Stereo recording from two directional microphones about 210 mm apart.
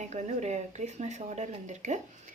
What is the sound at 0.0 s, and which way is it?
A woman's voice, 35° right (ahead or behind).